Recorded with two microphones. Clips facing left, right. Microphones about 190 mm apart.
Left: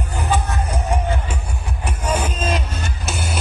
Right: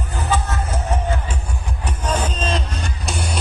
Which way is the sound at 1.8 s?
10° left (ahead or behind).